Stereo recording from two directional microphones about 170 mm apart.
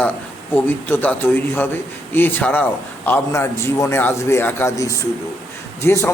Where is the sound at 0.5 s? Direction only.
10° left (ahead or behind).